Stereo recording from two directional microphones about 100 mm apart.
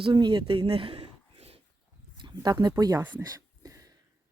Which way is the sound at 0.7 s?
70° right (ahead or behind).